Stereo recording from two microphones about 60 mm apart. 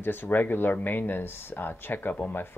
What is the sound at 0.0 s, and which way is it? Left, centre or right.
Speech, left.